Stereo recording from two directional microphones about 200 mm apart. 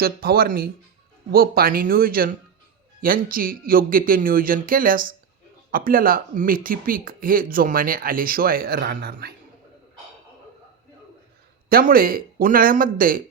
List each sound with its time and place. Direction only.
0.0 s speech: 50° right (ahead or behind)
11.7 s speech: 45° right (ahead or behind)